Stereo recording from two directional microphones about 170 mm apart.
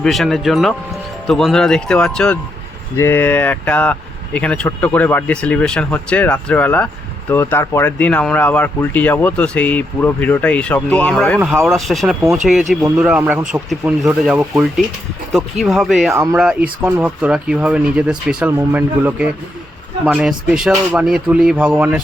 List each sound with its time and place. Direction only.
0.0 s speech: centre (ahead or behind)
16.1 s speech: 15° right (ahead or behind)
16.4 s speech: 5° right (ahead or behind)